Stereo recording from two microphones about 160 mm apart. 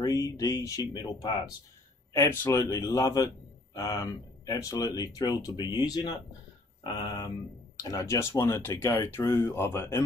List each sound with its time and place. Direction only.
0.0 s speech: 20° left (ahead or behind)